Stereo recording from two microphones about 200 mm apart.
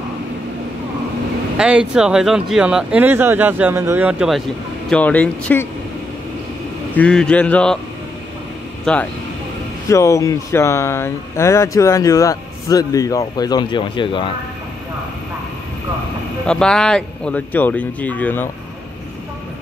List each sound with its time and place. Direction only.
1.6 s speech: 5° right (ahead or behind)
4.8 s speech: 5° left (ahead or behind)
7.0 s speech: 5° left (ahead or behind)
8.9 s speech: 5° left (ahead or behind)
9.8 s speech: 15° left (ahead or behind)
16.4 s speech: 5° left (ahead or behind)